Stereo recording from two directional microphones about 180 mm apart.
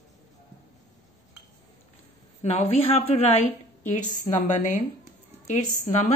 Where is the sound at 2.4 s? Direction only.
35° left (ahead or behind).